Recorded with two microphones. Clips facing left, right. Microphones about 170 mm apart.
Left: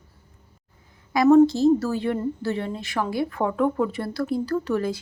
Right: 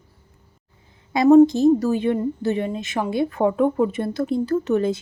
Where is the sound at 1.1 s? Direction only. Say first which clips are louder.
Right 3 dB; 20° right (ahead or behind).